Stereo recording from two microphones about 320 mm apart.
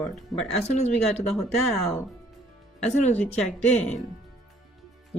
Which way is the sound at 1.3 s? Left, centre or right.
Centre.